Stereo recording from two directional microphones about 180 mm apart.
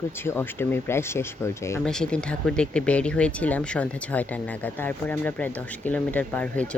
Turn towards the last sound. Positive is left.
turn(degrees=5)  # may be behind; listen again after turning